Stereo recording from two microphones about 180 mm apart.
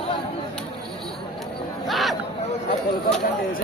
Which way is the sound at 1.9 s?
Centre (ahead or behind).